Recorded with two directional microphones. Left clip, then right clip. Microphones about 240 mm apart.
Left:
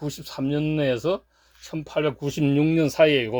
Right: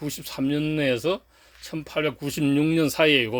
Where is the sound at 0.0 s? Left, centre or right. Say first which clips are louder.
Right 1 dB; centre.